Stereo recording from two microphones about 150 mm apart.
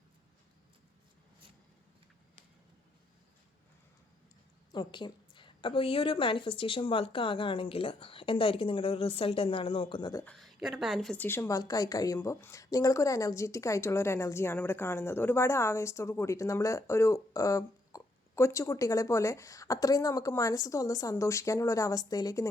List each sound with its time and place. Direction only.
4.7 s a woman's voice: 30° left (ahead or behind)
10.2 s speech: centre (ahead or behind); by 22.4 s 25° left (ahead or behind)